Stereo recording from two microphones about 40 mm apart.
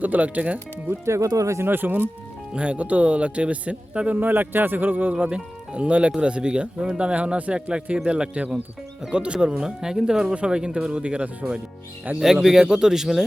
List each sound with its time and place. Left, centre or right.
0.0 s speech: right
1.6 s speech: right
2.5 s speech: right
4.2 s a man's voice: right
5.1 s speech: right
10.9 s speech: right
12.2 s a man's voice: centre